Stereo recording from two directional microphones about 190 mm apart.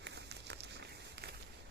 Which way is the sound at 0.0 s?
65° right (ahead or behind).